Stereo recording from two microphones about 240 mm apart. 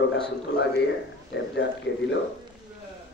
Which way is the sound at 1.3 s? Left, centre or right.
Left.